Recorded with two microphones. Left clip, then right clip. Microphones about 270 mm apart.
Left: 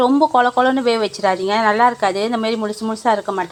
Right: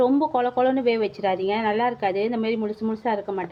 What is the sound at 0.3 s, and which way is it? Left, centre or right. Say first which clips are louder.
Speech: left 7 dB; centre.